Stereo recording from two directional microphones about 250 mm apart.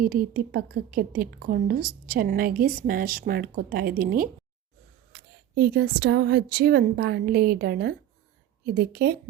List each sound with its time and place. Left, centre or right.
0.0 s a woman's voice: right